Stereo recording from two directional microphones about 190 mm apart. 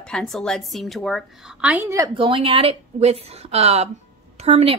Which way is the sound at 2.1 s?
25° right (ahead or behind).